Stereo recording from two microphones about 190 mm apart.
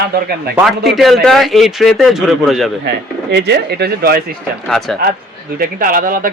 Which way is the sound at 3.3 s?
60° right (ahead or behind).